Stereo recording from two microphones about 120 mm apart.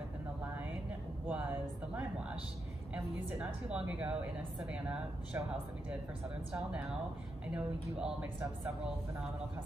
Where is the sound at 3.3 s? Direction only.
10° right (ahead or behind).